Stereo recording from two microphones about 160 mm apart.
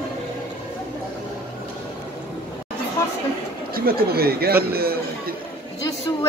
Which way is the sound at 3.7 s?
70° right (ahead or behind).